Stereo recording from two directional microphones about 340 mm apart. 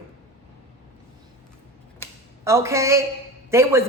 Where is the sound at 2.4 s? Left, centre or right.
Centre.